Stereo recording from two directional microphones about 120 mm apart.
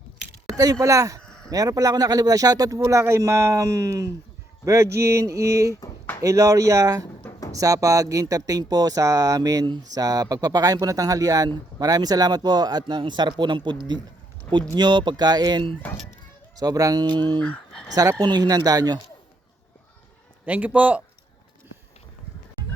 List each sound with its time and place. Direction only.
0.4 s speech: 30° right (ahead or behind)
1.2 s a sound: 5° left (ahead or behind)
1.5 s speech: 30° right (ahead or behind)
17.4 s a sound: 10° left (ahead or behind)
18.2 s speech: 35° right (ahead or behind)
20.4 s a man's voice: 15° right (ahead or behind)